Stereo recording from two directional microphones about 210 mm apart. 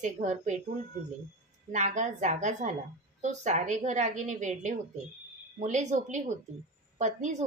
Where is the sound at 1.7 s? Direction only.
35° right (ahead or behind).